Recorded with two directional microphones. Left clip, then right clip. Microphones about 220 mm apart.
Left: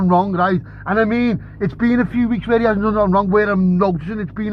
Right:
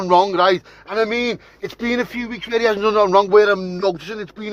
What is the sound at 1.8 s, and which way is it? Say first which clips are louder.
Speech: left 2 dB; 40° right (ahead or behind).